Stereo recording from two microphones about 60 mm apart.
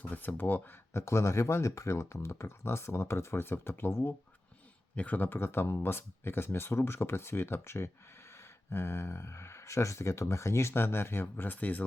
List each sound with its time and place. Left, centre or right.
0.0 s speech: left
0.9 s speech: left
4.9 s speech: left